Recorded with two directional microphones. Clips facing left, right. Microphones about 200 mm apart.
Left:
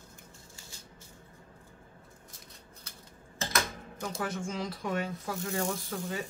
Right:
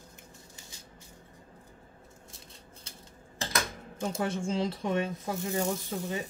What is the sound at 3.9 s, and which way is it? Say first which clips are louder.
Speech: right 4 dB; 25° right (ahead or behind).